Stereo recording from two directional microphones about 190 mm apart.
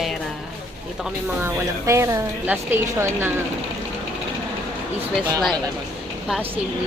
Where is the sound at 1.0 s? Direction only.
15° right (ahead or behind).